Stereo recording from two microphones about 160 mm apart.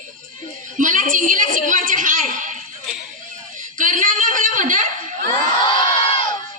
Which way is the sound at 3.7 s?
55° right (ahead or behind).